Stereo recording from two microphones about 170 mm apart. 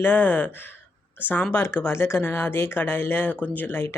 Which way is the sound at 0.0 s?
10° left (ahead or behind).